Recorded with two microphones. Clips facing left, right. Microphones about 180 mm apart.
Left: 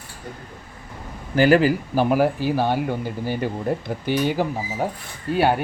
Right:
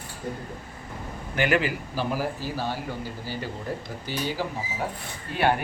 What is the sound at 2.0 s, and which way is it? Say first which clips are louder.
Speech: left 9 dB; 65° left (ahead or behind).